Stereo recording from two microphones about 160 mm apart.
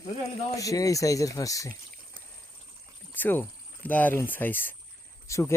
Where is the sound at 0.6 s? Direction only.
20° left (ahead or behind).